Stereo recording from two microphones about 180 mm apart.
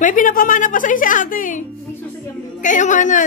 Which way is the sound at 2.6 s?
45° left (ahead or behind).